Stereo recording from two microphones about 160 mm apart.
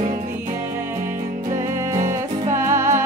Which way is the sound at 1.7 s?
15° right (ahead or behind).